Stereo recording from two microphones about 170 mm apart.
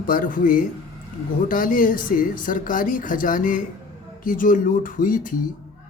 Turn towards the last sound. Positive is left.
turn(degrees=55)  # may be behind; listen again after turning